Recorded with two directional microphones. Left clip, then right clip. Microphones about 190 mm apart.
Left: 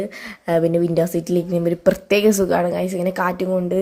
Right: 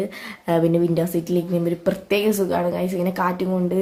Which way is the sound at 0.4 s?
25° left (ahead or behind).